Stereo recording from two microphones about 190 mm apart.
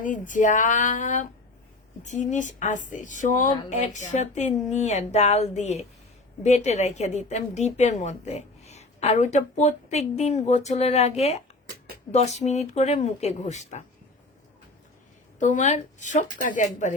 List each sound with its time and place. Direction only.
0.0 s a woman's voice: 40° left (ahead or behind)
12.4 s a woman's voice: 35° left (ahead or behind)
15.4 s a woman's voice: 40° left (ahead or behind)